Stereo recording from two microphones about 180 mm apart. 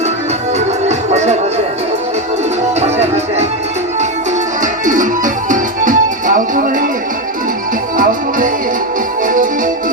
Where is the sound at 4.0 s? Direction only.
40° right (ahead or behind).